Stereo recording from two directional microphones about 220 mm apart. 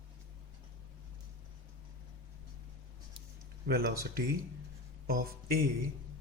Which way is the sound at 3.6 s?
40° right (ahead or behind).